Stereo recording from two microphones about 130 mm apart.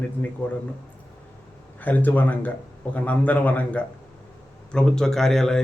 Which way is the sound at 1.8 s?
15° left (ahead or behind).